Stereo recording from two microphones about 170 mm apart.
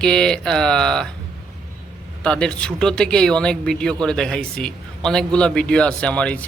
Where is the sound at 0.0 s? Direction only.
5° left (ahead or behind).